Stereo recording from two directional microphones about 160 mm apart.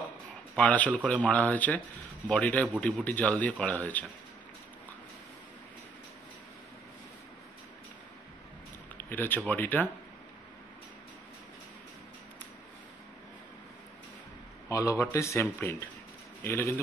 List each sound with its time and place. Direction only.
0.6 s speech: 10° left (ahead or behind)
8.9 s a sound: 10° left (ahead or behind)
9.5 s speech: 10° left (ahead or behind)
14.7 s speech: 20° left (ahead or behind)